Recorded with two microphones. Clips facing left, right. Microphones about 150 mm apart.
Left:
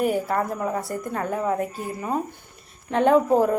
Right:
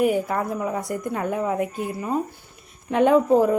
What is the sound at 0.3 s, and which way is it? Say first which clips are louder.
A woman's voice: even; 10° right (ahead or behind).